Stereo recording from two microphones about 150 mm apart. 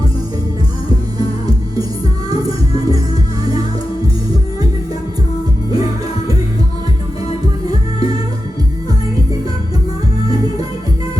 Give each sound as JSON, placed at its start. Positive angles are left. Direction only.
{"t": 2.4, "sound": "music", "side_deg": -25}
{"t": 5.7, "sound": "music", "side_deg": -25}
{"t": 7.3, "sound": "music", "side_deg": 40}